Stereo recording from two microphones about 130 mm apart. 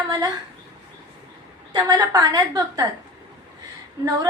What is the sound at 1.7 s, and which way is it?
A woman's voice, 35° right (ahead or behind).